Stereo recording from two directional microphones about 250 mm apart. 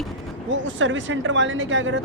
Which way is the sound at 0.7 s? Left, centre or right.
Right.